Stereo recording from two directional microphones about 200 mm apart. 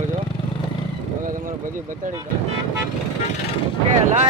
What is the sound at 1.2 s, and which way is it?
Vehicle, 40° right (ahead or behind).